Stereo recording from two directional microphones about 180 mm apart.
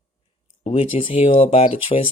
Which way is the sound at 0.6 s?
35° left (ahead or behind).